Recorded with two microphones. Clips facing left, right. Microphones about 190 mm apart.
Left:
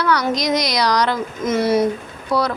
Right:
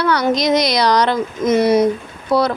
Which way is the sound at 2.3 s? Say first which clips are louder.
Right 4 dB; 25° right (ahead or behind).